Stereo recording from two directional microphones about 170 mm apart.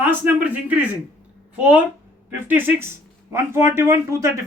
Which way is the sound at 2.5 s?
15° right (ahead or behind).